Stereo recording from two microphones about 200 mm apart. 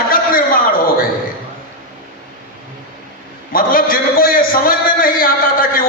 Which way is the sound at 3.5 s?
45° left (ahead or behind).